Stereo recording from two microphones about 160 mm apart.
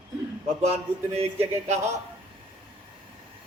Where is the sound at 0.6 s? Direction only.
40° right (ahead or behind).